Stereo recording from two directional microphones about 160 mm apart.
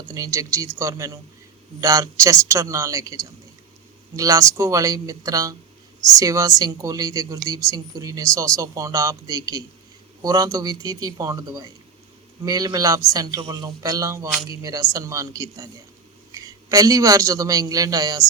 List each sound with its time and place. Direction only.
0.1 s a woman's voice: 20° right (ahead or behind)